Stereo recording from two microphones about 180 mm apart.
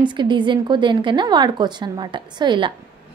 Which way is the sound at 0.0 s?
25° right (ahead or behind).